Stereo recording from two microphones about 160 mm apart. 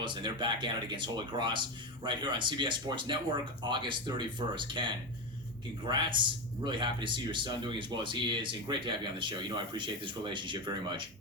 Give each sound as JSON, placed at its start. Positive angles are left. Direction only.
{"t": 0.0, "sound": "a man's voice", "side_deg": -30}